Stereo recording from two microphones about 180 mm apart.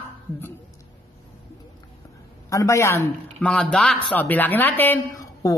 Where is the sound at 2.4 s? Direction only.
15° left (ahead or behind).